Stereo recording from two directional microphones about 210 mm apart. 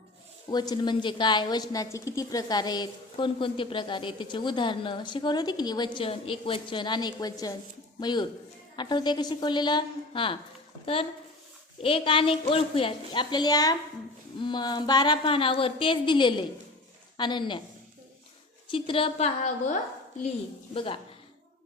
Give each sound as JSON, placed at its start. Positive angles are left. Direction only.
{"t": 0.5, "sound": "a woman's voice", "side_deg": 20}
{"t": 18.7, "sound": "a woman's voice", "side_deg": 25}
{"t": 20.7, "sound": "a woman's voice", "side_deg": 25}